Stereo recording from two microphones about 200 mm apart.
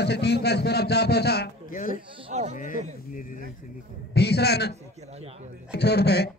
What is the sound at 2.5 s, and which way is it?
Speech, 40° left (ahead or behind).